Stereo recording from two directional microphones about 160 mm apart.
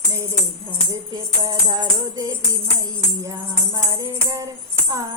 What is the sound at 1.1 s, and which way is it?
Music, 25° right (ahead or behind).